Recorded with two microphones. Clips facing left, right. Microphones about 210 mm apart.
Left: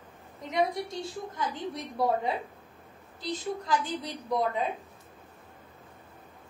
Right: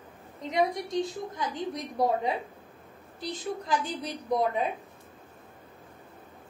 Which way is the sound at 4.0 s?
20° right (ahead or behind).